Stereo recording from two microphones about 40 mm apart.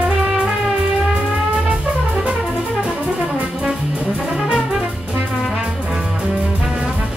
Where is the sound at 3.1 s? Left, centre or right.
Right.